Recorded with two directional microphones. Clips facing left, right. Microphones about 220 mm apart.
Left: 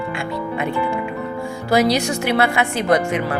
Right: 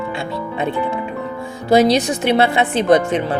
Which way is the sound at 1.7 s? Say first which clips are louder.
Right 4 dB; 20° right (ahead or behind).